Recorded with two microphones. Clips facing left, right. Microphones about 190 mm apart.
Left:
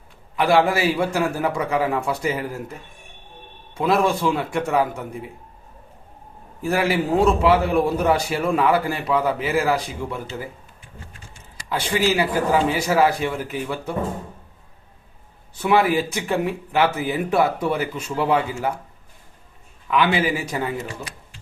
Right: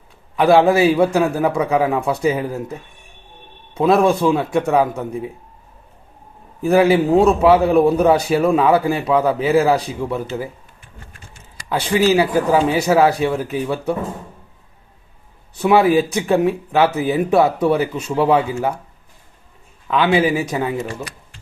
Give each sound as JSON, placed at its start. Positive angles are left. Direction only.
{"t": 0.3, "sound": "speech", "side_deg": -20}
{"t": 3.8, "sound": "speech", "side_deg": -20}
{"t": 6.6, "sound": "speech", "side_deg": -20}
{"t": 11.7, "sound": "speech", "side_deg": -20}
{"t": 15.5, "sound": "speech", "side_deg": -20}
{"t": 19.9, "sound": "speech", "side_deg": -25}